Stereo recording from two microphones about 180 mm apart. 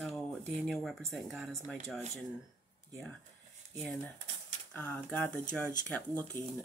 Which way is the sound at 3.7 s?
10° left (ahead or behind).